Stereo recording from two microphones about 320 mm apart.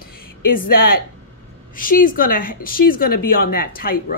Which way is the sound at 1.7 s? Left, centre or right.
Left.